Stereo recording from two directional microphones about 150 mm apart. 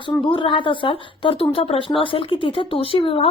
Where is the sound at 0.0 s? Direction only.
35° left (ahead or behind).